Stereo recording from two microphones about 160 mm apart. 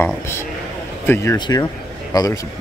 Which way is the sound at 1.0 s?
15° left (ahead or behind).